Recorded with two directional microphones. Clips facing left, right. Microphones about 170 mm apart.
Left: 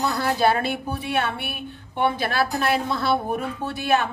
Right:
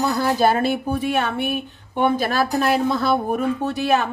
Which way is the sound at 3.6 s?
40° right (ahead or behind).